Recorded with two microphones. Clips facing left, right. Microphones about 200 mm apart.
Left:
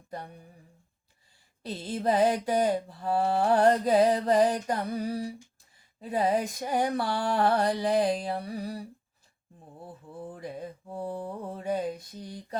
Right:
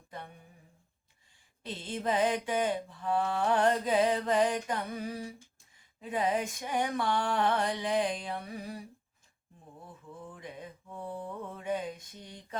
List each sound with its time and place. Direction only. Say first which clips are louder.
0.1 s mantra: left 5 dB; 40° left (ahead or behind)
1.6 s mantra: left 5 dB; 40° left (ahead or behind)